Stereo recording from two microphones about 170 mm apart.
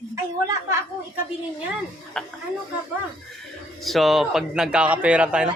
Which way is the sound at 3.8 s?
Centre (ahead or behind).